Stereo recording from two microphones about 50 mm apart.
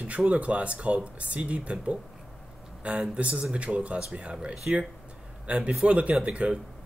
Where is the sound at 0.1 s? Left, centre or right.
Right.